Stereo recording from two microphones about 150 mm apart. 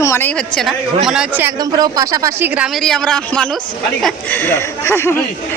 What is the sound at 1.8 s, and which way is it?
Speech, 25° right (ahead or behind).